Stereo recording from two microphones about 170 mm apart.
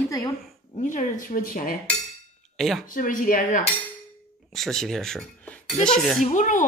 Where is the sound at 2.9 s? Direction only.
50° left (ahead or behind).